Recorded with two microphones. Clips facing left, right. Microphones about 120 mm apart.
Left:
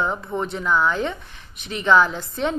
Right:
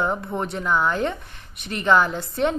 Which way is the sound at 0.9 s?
50° right (ahead or behind).